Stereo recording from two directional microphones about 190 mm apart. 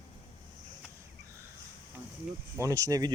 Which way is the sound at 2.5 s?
15° right (ahead or behind).